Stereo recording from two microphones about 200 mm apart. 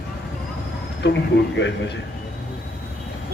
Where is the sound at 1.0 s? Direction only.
60° left (ahead or behind).